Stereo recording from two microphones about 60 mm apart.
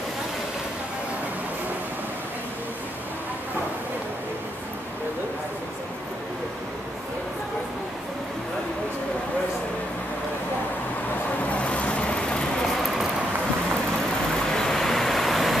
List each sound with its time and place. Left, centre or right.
11.4 s vehicle: left
14.5 s vehicle: centre